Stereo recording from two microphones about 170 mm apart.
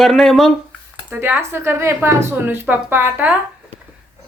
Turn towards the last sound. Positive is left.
turn(degrees=-10)  # may be behind; listen again after turning